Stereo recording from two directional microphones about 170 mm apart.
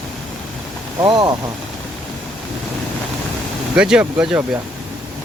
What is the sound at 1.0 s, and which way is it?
Speech, 25° right (ahead or behind).